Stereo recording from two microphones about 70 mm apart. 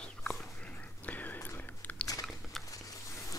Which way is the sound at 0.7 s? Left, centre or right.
Left.